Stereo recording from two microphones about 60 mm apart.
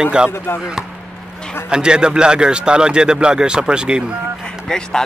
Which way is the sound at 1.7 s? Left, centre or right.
Centre.